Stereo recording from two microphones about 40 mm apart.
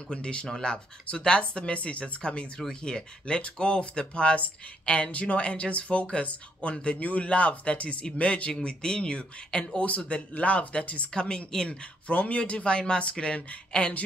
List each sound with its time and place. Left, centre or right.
0.1 s speech: left
0.5 s speech: centre
12.1 s speech: left